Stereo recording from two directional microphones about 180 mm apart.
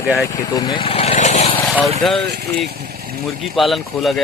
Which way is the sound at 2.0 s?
Centre (ahead or behind).